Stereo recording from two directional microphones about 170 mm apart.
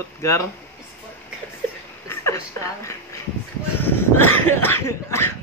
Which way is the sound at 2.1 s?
15° left (ahead or behind).